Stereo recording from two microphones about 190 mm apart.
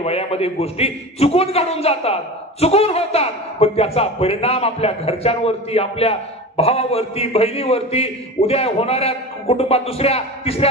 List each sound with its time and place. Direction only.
0.0 s a man's voice: 30° left (ahead or behind)